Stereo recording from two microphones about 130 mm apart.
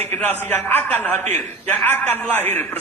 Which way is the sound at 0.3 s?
15° left (ahead or behind).